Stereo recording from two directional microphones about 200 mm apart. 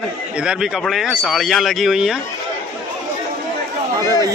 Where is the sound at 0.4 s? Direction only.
Centre (ahead or behind).